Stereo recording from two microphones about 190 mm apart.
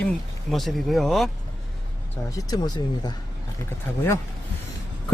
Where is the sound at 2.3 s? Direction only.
20° left (ahead or behind).